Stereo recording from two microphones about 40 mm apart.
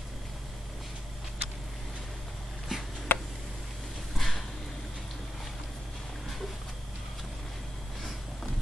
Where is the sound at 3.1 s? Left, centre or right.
Left.